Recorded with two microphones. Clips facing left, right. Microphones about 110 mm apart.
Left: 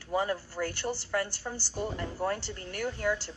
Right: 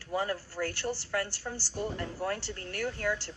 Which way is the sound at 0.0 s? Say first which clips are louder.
Left 2 dB; centre (ahead or behind).